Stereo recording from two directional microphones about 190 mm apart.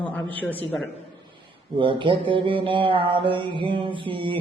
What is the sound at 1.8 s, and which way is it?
Mantra, 25° right (ahead or behind).